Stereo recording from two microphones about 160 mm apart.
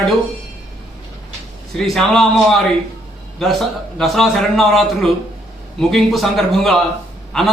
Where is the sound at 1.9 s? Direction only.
Centre (ahead or behind).